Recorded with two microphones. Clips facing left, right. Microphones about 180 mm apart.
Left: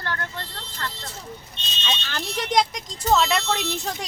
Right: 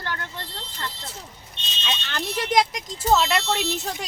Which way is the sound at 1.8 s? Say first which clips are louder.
Right 1 dB; centre (ahead or behind).